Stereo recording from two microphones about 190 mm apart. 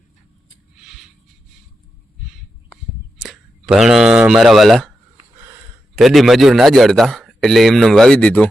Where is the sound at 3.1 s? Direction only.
Centre (ahead or behind).